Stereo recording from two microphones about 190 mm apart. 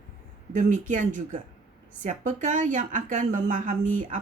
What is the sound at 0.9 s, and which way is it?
A woman's voice, 40° right (ahead or behind).